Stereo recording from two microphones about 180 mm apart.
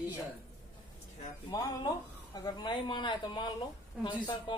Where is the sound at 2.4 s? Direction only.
25° left (ahead or behind).